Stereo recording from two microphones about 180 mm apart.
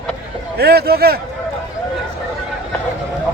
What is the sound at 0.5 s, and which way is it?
Speech, 60° right (ahead or behind).